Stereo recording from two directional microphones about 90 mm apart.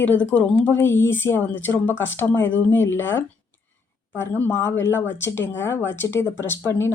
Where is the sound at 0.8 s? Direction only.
25° left (ahead or behind).